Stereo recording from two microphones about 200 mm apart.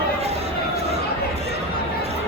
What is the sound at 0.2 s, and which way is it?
Chatter, 30° right (ahead or behind).